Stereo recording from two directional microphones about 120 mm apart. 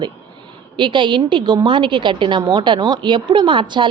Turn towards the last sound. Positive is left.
turn(degrees=-40)  # may be behind; listen again after turning